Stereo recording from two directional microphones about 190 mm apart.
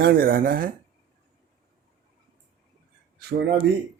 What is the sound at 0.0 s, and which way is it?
Speech, 50° right (ahead or behind).